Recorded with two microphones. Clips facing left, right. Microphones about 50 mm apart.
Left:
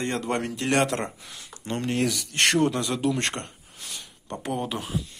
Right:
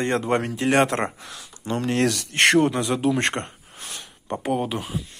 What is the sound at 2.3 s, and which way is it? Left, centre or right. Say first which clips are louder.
Speech: right 5 dB; right.